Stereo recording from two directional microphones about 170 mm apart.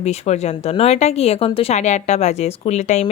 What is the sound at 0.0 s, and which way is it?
Speech, 40° left (ahead or behind).